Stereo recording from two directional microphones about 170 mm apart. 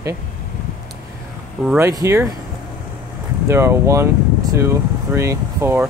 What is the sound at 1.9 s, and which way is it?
Speech, 20° right (ahead or behind).